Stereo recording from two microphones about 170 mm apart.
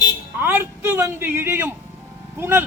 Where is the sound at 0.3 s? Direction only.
10° right (ahead or behind).